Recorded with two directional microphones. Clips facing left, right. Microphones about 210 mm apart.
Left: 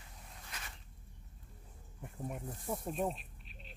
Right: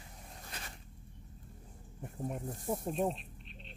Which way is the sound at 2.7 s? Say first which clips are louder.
Right 3 dB; centre (ahead or behind).